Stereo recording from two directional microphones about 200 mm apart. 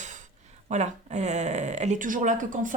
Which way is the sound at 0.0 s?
40° right (ahead or behind).